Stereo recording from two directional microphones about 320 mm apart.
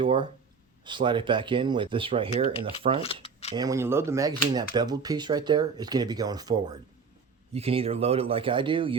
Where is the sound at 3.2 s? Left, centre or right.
Centre.